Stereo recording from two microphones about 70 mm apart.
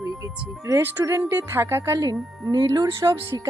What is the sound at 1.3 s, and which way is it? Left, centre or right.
Speech, right.